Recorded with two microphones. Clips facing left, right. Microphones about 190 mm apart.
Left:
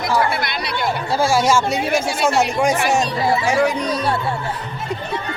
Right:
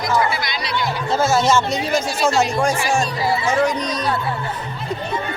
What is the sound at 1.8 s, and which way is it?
Speech, 55° left (ahead or behind).